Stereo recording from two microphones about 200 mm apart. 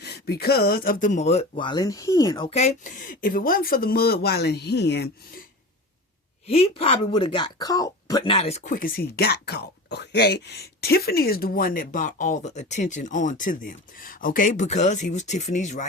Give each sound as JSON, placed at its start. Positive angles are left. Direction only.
{"t": 0.0, "sound": "speech", "side_deg": 55}
{"t": 2.5, "sound": "speech", "side_deg": 35}
{"t": 6.5, "sound": "speech", "side_deg": 30}